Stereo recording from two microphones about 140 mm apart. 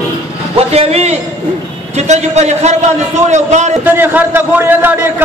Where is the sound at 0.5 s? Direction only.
45° right (ahead or behind).